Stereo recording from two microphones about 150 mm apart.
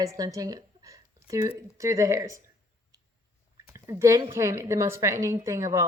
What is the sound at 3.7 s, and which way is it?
Speech, 20° right (ahead or behind).